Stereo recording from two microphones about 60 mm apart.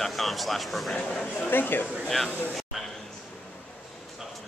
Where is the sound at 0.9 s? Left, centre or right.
Centre.